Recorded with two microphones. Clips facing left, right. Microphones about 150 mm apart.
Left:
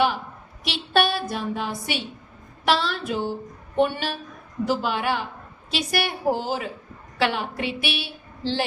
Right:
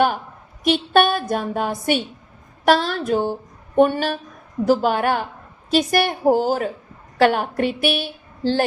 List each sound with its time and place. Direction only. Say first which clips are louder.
0.6 s a woman's voice: right 6 dB; 50° right (ahead or behind)